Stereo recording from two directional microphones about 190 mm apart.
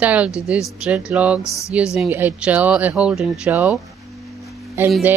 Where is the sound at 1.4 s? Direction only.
15° left (ahead or behind).